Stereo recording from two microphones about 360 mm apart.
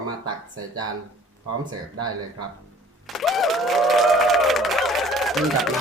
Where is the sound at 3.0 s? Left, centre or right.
Centre.